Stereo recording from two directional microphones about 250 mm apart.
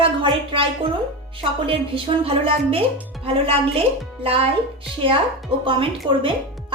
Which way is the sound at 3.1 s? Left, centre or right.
Centre.